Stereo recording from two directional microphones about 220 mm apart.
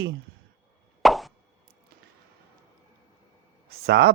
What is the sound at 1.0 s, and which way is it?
Plop, centre (ahead or behind).